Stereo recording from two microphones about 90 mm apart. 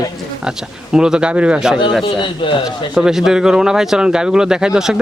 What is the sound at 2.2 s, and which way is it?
Speech, 65° left (ahead or behind).